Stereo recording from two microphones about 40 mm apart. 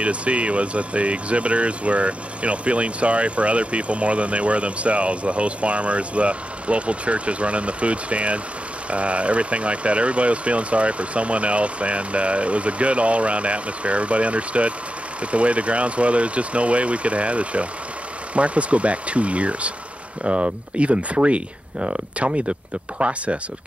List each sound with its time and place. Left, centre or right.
0.0 s speech: right